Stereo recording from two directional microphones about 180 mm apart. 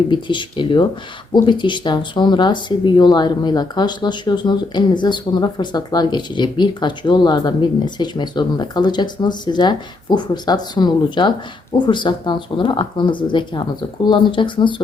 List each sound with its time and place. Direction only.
0.1 s speech: 25° left (ahead or behind)